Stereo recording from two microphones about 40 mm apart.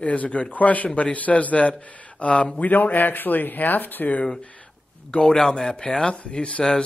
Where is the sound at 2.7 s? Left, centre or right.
Left.